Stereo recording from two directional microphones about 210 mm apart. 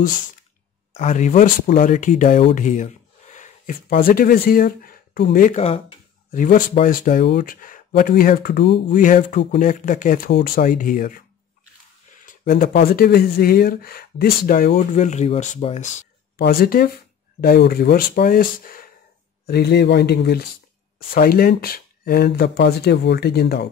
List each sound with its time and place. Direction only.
0.9 s speech: 35° left (ahead or behind)
5.6 s a sound: 25° left (ahead or behind)
6.4 s speech: 40° left (ahead or behind)
9.0 s speech: 40° left (ahead or behind)
12.3 s speech: 45° left (ahead or behind)
16.3 s speech: 45° left (ahead or behind)